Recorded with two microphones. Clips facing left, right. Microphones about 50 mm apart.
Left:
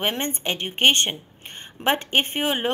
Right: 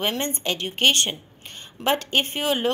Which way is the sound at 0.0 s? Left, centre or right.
Left.